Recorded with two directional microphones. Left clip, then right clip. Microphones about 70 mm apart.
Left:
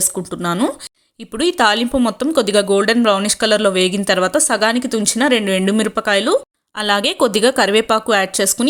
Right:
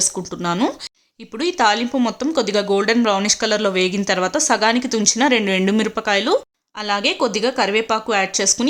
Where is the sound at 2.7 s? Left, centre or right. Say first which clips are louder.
Left 3 dB; left.